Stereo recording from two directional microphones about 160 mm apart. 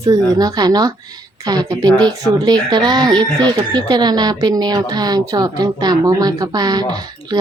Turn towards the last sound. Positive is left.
turn(degrees=-25)  # may be behind; listen again after turning